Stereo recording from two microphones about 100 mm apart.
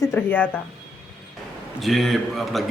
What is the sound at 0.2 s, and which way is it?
Speech, 20° left (ahead or behind).